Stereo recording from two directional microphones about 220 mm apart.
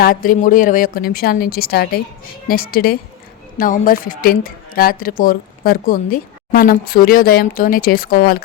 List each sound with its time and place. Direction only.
0.0 s a woman's voice: 40° left (ahead or behind)